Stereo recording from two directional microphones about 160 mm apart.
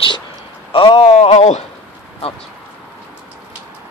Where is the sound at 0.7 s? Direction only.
30° left (ahead or behind).